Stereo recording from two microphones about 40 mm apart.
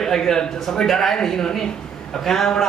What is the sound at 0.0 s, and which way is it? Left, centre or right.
A man's voice, centre.